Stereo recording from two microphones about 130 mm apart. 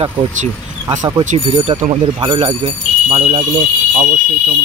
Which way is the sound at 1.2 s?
65° right (ahead or behind).